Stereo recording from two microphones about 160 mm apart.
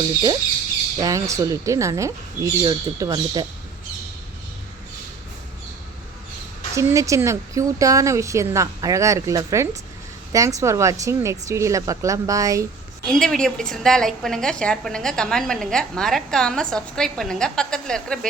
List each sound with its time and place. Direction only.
0.9 s speech: 20° right (ahead or behind)
6.7 s speech: 20° right (ahead or behind)
13.1 s a woman's voice: 5° left (ahead or behind)